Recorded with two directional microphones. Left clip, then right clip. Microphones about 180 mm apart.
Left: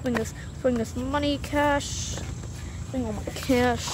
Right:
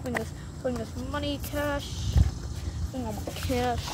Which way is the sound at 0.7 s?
70° left (ahead or behind).